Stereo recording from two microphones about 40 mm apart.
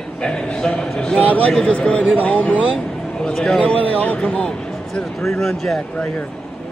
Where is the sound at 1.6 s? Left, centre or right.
Left.